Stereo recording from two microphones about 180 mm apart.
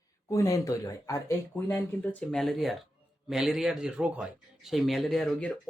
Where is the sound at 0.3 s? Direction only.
20° left (ahead or behind).